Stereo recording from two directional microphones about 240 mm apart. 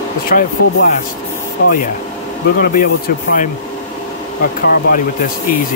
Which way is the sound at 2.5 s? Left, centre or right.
Left.